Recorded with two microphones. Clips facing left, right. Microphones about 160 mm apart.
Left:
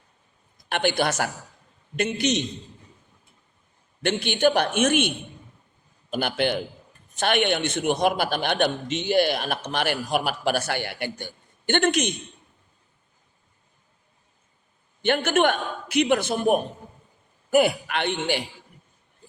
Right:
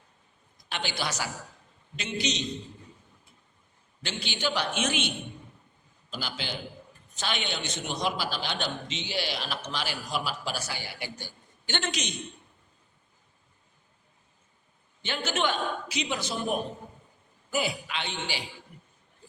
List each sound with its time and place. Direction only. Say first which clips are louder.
0.7 s a man's voice: left 10 dB; 55° left (ahead or behind)
4.0 s a man's voice: left 11 dB; 55° left (ahead or behind)
15.0 s a man's voice: left 9 dB; 55° left (ahead or behind)